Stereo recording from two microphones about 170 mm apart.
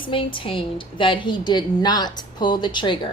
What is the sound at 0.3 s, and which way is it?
A woman's voice, 30° left (ahead or behind).